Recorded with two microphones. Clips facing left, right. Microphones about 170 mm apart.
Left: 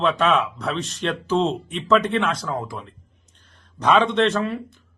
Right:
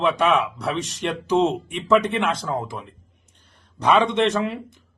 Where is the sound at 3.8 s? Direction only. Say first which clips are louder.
Even; 10° right (ahead or behind).